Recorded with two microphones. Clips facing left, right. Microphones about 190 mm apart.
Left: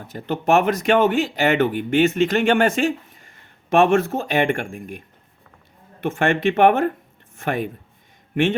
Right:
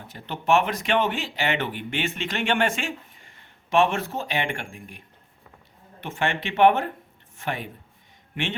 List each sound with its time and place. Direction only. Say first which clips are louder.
0.1 s speech: left 4 dB; 45° left (ahead or behind)